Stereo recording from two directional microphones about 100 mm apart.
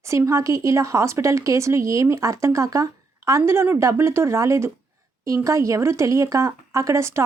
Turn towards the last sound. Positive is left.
turn(degrees=-30)  # may be behind; listen again after turning